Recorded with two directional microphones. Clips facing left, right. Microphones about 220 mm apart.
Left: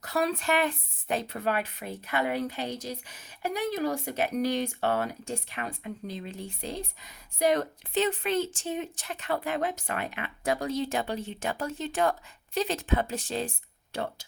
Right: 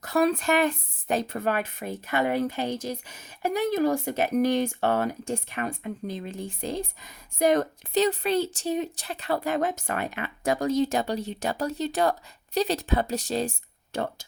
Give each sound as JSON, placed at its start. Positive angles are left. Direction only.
{"t": 0.0, "sound": "a woman's voice", "side_deg": -50}